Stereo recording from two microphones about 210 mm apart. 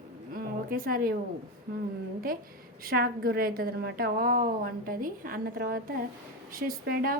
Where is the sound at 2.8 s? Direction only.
45° right (ahead or behind).